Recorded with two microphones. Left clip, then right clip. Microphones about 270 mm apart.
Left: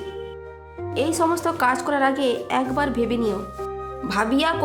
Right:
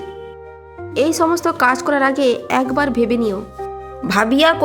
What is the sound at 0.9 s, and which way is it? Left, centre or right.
Speech, centre.